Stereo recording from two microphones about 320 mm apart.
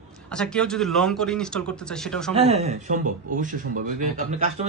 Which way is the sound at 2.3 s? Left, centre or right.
Centre.